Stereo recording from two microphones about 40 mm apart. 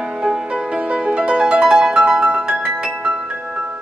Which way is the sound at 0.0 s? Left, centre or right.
Right.